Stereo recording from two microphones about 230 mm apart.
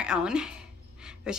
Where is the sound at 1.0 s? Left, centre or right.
Centre.